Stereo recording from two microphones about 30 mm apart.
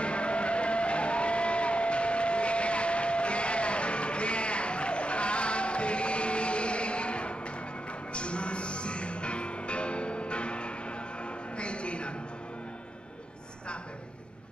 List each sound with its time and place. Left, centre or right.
0.0 s music: left